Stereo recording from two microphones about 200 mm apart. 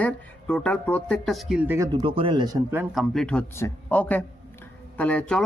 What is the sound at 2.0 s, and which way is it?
Speech, 25° right (ahead or behind).